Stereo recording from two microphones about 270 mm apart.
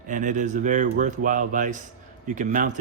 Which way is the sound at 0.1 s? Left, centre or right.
Right.